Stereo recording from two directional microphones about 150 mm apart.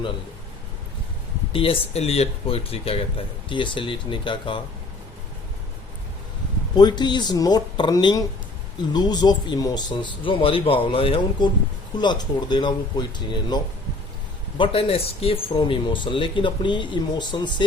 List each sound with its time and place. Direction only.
1.5 s speech: 35° left (ahead or behind)
6.7 s speech: 30° left (ahead or behind)
14.6 s speech: 40° left (ahead or behind)